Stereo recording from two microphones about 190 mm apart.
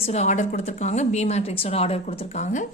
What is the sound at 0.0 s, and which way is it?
Speech, 35° left (ahead or behind).